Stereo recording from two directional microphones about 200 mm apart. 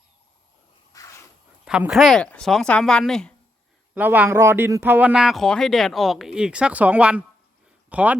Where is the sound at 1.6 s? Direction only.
5° right (ahead or behind).